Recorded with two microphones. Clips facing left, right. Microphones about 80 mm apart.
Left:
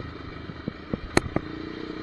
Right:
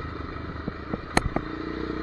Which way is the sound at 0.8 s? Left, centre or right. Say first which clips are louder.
Left 1 dB; right.